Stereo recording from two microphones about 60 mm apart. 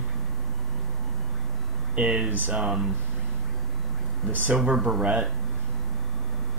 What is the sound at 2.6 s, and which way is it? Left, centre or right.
Speech, centre.